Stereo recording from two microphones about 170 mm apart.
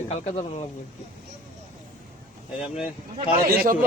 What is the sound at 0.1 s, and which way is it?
Speech, 40° left (ahead or behind).